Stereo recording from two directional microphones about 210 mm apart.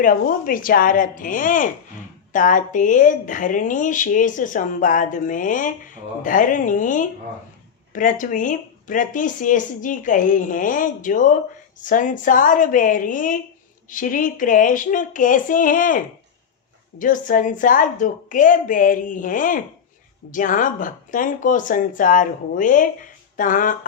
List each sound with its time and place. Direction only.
0.0 s speech: 40° left (ahead or behind)